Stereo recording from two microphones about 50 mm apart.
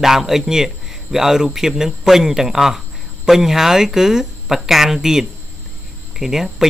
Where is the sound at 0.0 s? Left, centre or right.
Centre.